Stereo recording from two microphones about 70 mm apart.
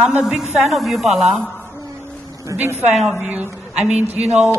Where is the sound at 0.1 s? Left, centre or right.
Centre.